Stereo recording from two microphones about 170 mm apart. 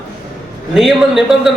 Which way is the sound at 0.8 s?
Centre (ahead or behind).